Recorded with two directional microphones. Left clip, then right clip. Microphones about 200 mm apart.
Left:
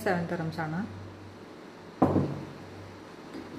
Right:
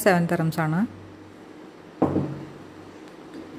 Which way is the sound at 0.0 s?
55° right (ahead or behind).